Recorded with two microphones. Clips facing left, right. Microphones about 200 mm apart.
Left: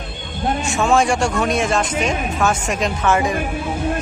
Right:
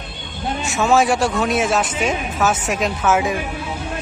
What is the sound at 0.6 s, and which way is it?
Speech, centre (ahead or behind).